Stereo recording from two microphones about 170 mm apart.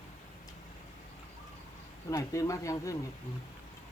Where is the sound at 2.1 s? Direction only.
20° left (ahead or behind).